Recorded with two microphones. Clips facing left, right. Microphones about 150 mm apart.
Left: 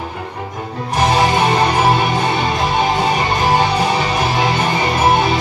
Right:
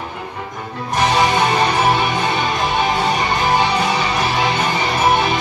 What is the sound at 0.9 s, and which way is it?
Music, 25° left (ahead or behind).